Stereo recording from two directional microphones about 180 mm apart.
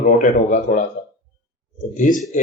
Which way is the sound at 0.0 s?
45° left (ahead or behind).